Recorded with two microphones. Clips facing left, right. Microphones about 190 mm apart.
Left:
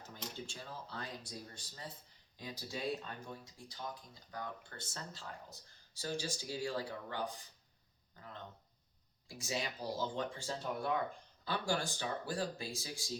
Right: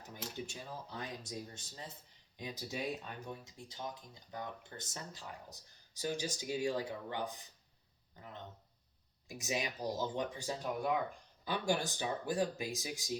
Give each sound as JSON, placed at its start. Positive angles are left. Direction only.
{"t": 0.0, "sound": "speech", "side_deg": -15}